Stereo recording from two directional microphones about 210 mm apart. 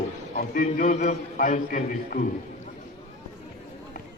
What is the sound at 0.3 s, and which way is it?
A man's voice, 40° left (ahead or behind).